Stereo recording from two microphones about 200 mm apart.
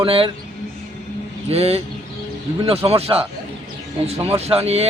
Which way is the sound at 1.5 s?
30° right (ahead or behind).